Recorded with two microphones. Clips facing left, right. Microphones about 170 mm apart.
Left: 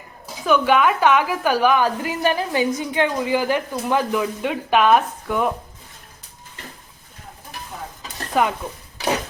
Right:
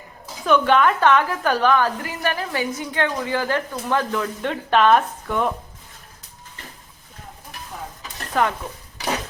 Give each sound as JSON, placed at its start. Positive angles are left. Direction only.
{"t": 0.4, "sound": "a woman's voice", "side_deg": 5}
{"t": 8.0, "sound": "stir", "side_deg": 10}